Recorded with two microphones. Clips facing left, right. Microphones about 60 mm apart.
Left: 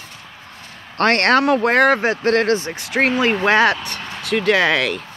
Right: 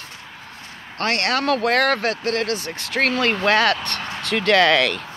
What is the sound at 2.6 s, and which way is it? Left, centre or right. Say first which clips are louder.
Speech: left 3 dB; centre.